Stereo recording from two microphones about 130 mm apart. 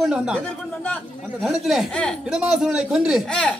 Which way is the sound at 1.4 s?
Centre (ahead or behind).